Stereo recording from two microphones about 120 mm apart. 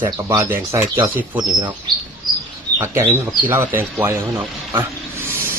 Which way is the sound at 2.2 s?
35° right (ahead or behind).